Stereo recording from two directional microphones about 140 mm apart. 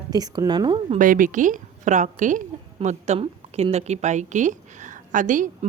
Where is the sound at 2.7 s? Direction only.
50° right (ahead or behind).